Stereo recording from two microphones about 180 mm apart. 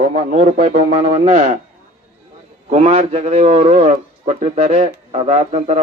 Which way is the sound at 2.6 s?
35° right (ahead or behind).